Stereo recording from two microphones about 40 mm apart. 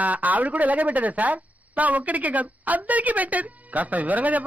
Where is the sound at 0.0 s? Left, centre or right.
Right.